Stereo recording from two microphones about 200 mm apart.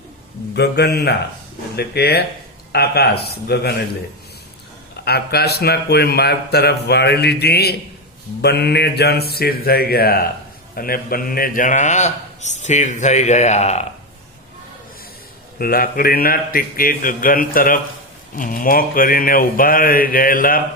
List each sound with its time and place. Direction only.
0.5 s mantra: 55° left (ahead or behind)
1.7 s speech: 55° left (ahead or behind)
5.0 s speech: 55° left (ahead or behind)
8.4 s mantra: 55° left (ahead or behind)
9.3 s a man's voice: 50° left (ahead or behind); by 13.8 s 35° left (ahead or behind)
15.5 s speech: 45° left (ahead or behind)